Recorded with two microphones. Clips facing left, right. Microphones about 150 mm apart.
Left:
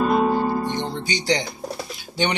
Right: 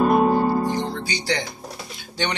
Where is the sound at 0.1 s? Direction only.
45° right (ahead or behind).